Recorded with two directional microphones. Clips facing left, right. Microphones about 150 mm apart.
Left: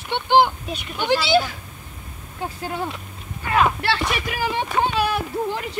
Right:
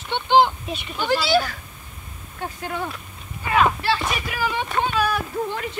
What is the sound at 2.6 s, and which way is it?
Speech, 25° left (ahead or behind).